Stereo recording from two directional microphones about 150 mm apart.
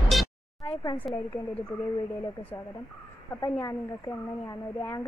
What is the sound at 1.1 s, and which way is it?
A woman's voice, 15° left (ahead or behind).